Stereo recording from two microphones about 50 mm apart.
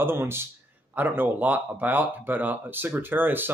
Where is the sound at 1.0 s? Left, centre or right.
Right.